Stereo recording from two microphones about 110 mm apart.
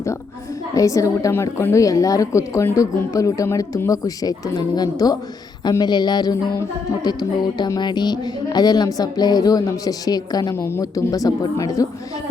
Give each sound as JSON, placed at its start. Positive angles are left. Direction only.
{"t": 0.8, "sound": "a woman's voice", "side_deg": 30}